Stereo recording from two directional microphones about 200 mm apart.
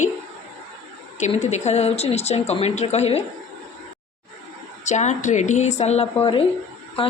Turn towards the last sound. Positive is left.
turn(degrees=25)  # may be behind; listen again after turning